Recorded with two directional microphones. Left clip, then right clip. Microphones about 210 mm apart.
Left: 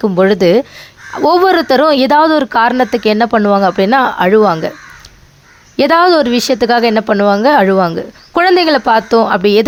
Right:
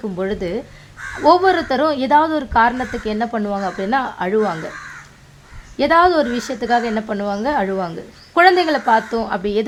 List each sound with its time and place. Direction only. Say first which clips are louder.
0.0 s a woman's voice: left 13 dB; 40° left (ahead or behind)
5.7 s a woman's voice: left 5 dB; 35° left (ahead or behind)